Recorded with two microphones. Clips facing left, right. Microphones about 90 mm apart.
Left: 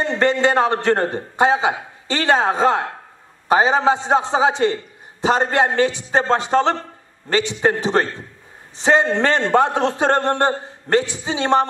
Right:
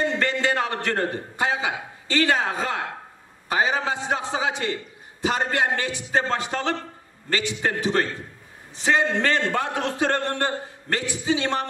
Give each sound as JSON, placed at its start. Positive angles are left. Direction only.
{"t": 0.0, "sound": "a man's voice", "side_deg": 30}